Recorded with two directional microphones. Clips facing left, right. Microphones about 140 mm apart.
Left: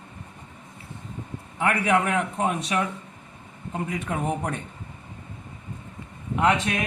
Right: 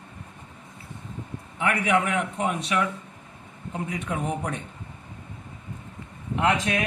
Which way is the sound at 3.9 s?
50° left (ahead or behind).